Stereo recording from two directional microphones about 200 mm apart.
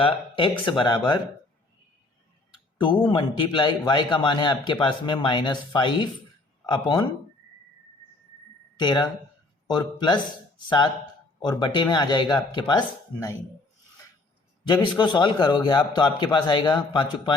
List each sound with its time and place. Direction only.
0.0 s a man's voice: 25° left (ahead or behind)
2.7 s a man's voice: 25° left (ahead or behind)
8.8 s a man's voice: 20° left (ahead or behind)
14.7 s a man's voice: 20° left (ahead or behind)